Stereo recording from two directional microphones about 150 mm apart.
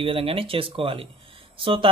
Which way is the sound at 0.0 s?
40° right (ahead or behind).